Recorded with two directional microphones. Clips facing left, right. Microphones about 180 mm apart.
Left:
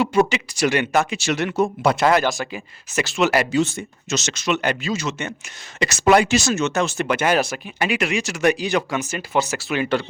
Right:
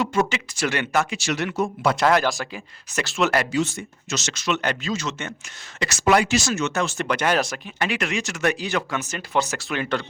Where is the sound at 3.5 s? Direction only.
25° left (ahead or behind).